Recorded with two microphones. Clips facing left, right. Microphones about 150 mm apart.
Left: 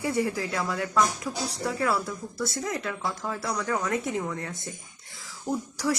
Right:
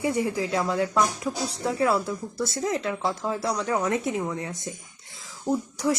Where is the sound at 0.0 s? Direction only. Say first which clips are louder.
Right 2 dB; 20° right (ahead or behind).